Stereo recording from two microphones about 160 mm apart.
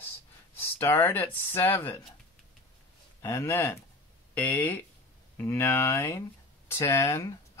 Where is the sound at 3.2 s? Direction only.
15° left (ahead or behind).